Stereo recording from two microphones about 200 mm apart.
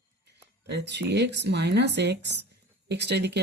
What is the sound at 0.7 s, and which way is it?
Speech, 60° right (ahead or behind).